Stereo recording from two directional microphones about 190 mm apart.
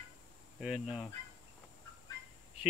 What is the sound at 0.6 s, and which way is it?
Speech, 5° right (ahead or behind).